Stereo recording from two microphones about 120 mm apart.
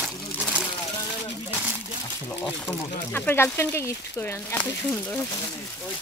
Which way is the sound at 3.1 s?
15° left (ahead or behind).